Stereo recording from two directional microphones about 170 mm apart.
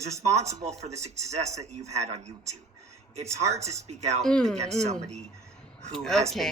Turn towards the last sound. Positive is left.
turn(degrees=0)  # may be behind; listen again after turning